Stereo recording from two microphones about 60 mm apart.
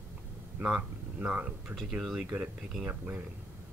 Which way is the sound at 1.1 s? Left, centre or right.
Right.